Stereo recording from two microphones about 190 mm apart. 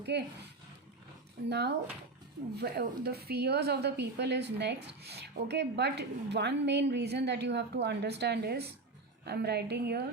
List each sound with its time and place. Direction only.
0.1 s speech: 60° right (ahead or behind)
1.5 s speech: 60° right (ahead or behind)